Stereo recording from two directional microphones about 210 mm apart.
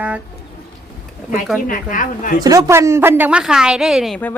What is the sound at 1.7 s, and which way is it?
Speech, 40° left (ahead or behind).